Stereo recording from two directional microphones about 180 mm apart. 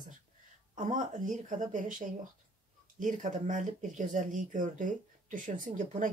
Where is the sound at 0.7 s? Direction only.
45° right (ahead or behind).